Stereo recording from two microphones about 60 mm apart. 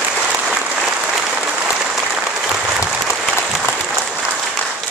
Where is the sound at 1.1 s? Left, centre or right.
Centre.